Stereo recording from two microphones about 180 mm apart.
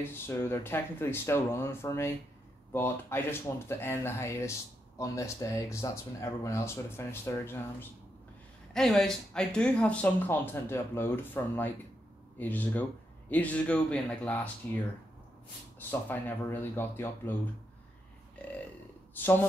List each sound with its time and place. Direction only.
0.0 s speech: 15° left (ahead or behind)
8.7 s speech: centre (ahead or behind)
15.9 s speech: 10° left (ahead or behind)
19.1 s speech: 10° left (ahead or behind)